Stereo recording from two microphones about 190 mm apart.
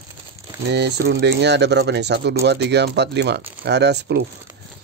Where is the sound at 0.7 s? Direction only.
60° right (ahead or behind).